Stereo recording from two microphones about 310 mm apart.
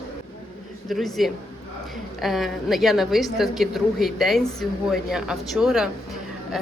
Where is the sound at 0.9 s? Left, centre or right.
Centre.